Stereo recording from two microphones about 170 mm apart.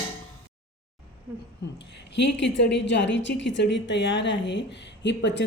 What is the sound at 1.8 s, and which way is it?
A woman's voice, 90° left.